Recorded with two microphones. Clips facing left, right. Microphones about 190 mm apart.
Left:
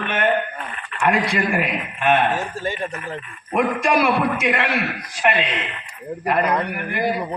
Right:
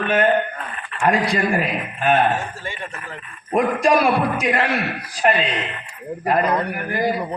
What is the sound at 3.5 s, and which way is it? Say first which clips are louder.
A man's voice: right 2 dB; 35° right (ahead or behind).